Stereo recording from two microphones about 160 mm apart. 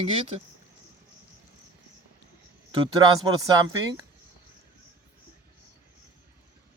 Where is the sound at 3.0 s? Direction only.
25° right (ahead or behind).